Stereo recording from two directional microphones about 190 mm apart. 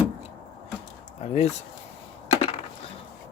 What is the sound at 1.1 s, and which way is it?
Speech, 35° left (ahead or behind).